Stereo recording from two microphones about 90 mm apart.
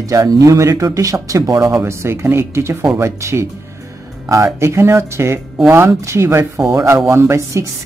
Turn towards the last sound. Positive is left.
turn(degrees=-35)  # may be behind; listen again after turning